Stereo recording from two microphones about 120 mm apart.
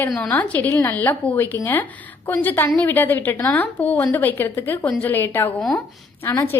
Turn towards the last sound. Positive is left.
turn(degrees=20)  # may be behind; listen again after turning